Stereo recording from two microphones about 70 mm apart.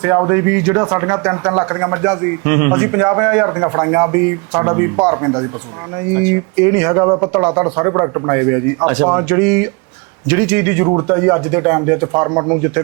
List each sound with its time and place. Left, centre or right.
0.0 s speech: right